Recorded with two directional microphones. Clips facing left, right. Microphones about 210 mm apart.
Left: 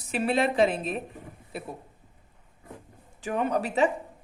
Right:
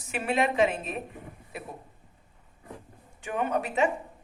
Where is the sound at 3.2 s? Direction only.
35° left (ahead or behind).